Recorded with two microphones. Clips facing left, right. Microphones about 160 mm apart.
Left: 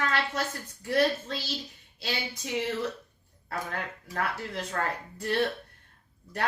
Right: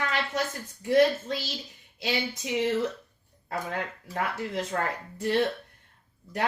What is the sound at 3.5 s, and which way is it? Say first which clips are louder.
A woman's voice: right 3 dB; 20° right (ahead or behind).